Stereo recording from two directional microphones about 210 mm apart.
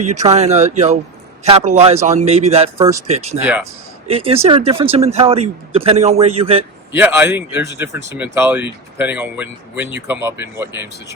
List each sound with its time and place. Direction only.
0.0 s a man's voice: 35° right (ahead or behind)
3.4 s speech: 5° right (ahead or behind)
4.0 s speech: 30° right (ahead or behind)
6.9 s speech: 10° right (ahead or behind)